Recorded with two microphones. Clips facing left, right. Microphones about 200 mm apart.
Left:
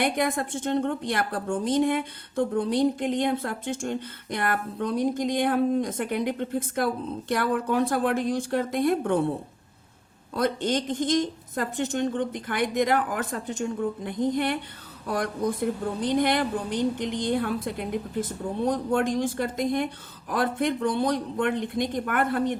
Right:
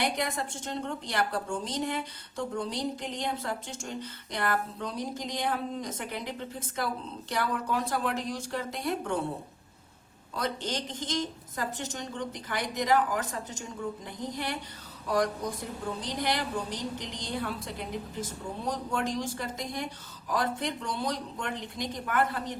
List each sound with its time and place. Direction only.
0.0 s a woman's voice: 50° left (ahead or behind)
10.3 s a woman's voice: 55° left (ahead or behind)